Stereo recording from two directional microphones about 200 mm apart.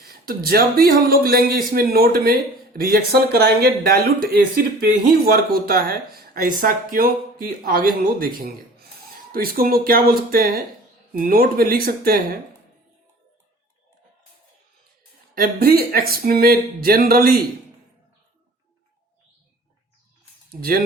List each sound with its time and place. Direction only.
0.0 s a man's voice: 50° right (ahead or behind)
15.4 s a man's voice: 50° right (ahead or behind)
20.5 s speech: 50° right (ahead or behind)